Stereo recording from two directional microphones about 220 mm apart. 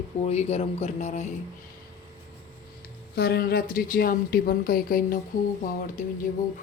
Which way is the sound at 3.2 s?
45° left (ahead or behind).